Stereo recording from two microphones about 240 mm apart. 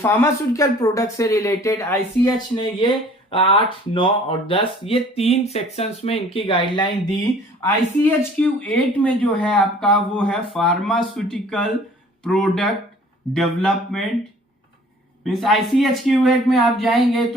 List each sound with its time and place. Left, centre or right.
0.0 s speech: centre
7.6 s speech: centre
15.2 s speech: centre